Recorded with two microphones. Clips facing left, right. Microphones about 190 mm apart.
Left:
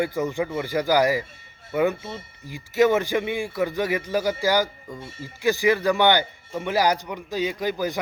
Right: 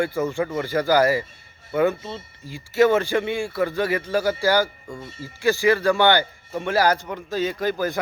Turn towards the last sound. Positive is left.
turn(degrees=15)  # may be behind; listen again after turning